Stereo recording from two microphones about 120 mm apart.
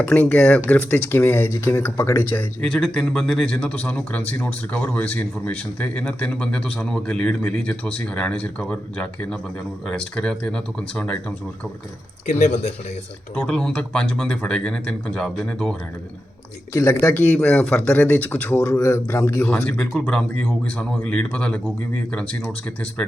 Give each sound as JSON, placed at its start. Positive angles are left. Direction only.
{"t": 0.0, "sound": "speech", "side_deg": 10}
{"t": 12.3, "sound": "speech", "side_deg": 65}
{"t": 13.5, "sound": "speech", "side_deg": 10}
{"t": 16.7, "sound": "speech", "side_deg": 25}